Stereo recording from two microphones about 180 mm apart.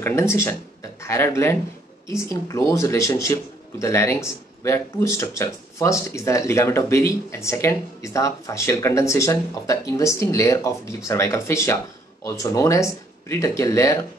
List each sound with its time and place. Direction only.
0.0 s speech: 15° left (ahead or behind)